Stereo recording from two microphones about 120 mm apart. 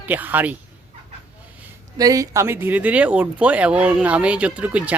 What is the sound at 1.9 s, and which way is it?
Speech, 30° right (ahead or behind).